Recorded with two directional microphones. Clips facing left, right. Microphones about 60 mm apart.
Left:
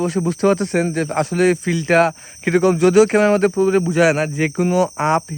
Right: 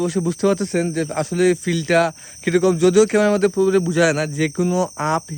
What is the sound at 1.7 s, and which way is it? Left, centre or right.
Speech, left.